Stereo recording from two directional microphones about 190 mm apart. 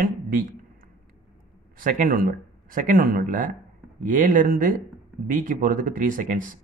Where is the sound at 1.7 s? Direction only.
45° right (ahead or behind).